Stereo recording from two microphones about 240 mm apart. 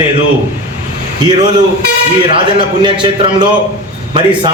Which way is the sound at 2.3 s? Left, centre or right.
Right.